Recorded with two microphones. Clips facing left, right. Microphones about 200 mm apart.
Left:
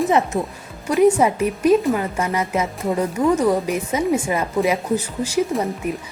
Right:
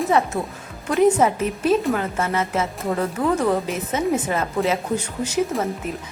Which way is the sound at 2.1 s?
15° left (ahead or behind).